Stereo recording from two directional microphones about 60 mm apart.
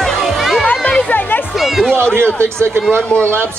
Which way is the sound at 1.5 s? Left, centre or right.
Centre.